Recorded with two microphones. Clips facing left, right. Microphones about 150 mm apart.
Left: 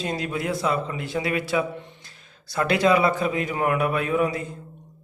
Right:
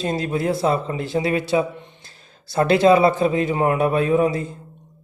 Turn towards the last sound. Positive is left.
turn(degrees=-30)  # may be behind; listen again after turning